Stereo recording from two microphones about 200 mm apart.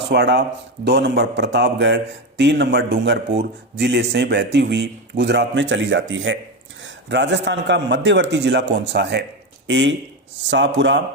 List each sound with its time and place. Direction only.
0.1 s a man's voice: 55° right (ahead or behind)